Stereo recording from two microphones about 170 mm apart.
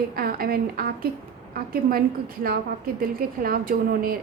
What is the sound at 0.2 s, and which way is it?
A woman's voice, 60° right (ahead or behind).